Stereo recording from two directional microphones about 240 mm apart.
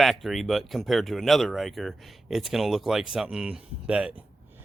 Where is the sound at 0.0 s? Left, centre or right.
Centre.